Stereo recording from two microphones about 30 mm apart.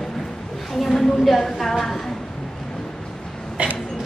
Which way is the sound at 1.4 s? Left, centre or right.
Centre.